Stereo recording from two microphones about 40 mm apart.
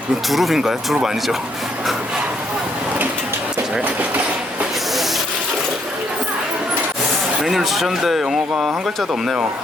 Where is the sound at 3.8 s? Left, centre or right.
Right.